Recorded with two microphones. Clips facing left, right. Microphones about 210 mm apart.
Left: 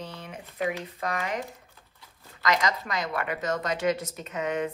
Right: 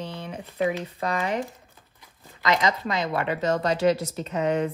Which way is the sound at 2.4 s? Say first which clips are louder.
Right 3 dB; 25° right (ahead or behind).